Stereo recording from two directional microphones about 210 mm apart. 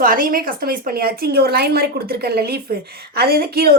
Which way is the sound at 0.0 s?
40° right (ahead or behind).